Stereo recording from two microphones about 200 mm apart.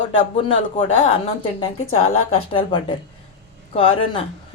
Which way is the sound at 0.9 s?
75° left (ahead or behind).